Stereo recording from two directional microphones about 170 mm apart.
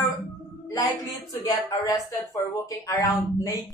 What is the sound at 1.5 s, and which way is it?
Speech, 20° left (ahead or behind).